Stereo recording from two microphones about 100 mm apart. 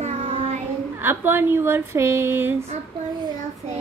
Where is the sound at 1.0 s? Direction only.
20° right (ahead or behind).